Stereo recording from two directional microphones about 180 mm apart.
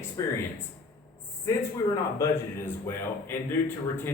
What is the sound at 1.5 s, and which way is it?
Speech, 15° left (ahead or behind).